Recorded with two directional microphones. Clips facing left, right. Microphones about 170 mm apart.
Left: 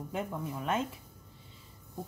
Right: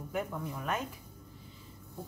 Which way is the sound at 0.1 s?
25° left (ahead or behind).